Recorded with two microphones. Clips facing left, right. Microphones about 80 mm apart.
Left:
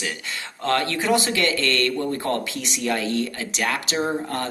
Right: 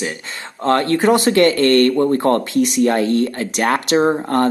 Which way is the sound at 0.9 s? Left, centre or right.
Right.